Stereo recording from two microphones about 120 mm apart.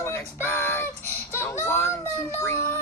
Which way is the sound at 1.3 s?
20° left (ahead or behind).